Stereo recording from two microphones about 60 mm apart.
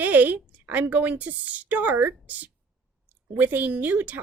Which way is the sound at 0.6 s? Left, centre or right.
Right.